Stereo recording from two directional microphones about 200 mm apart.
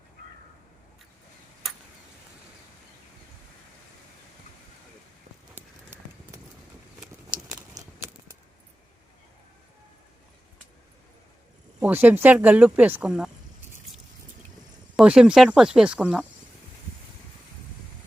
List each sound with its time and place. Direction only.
7.7 s a sound: 20° right (ahead or behind)
11.8 s speech: 10° right (ahead or behind)
14.9 s speech: 5° right (ahead or behind)